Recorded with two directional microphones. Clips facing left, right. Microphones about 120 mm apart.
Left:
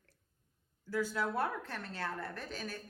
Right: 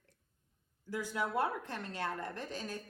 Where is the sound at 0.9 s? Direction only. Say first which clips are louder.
Left 1 dB; 15° right (ahead or behind).